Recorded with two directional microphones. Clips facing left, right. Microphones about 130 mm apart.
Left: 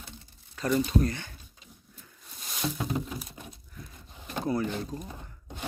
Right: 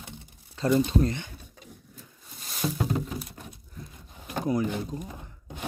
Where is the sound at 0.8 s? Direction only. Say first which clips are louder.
Right 2 dB; 25° right (ahead or behind).